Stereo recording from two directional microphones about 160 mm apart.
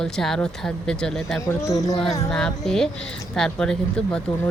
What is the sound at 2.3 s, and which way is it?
Speech, 5° left (ahead or behind).